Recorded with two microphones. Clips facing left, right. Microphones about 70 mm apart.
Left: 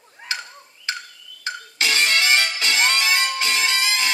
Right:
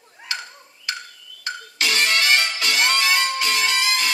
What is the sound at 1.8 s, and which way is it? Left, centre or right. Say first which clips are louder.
Music: even; left.